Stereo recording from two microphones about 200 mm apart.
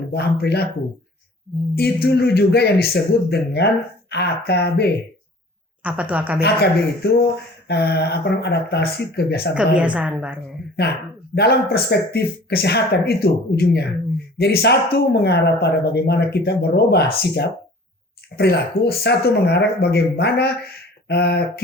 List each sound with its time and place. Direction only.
0.1 s speech: 55° left (ahead or behind)
1.7 s speech: 50° left (ahead or behind)
5.8 s a woman's voice: 5° right (ahead or behind)
6.4 s speech: 55° left (ahead or behind)
9.7 s a woman's voice: 5° right (ahead or behind)
11.3 s speech: 50° left (ahead or behind)